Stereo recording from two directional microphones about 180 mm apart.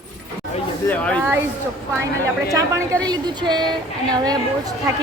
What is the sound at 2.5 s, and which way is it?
A woman's voice, 20° right (ahead or behind).